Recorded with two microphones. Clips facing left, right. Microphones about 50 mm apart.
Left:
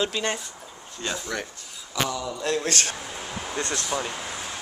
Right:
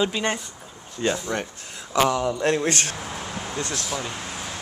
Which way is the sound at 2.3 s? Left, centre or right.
Right.